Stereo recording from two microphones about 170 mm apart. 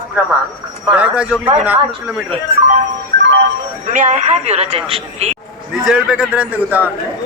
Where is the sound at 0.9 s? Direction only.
10° right (ahead or behind).